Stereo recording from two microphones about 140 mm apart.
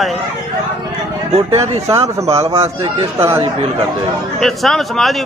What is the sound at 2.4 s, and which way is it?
Speech, 20° right (ahead or behind).